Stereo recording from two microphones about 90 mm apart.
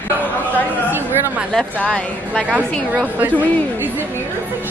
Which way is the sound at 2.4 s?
15° right (ahead or behind).